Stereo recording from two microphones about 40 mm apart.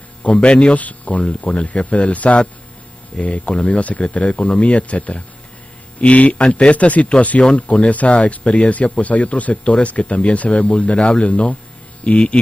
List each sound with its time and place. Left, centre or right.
0.3 s speech: left
0.7 s speech: left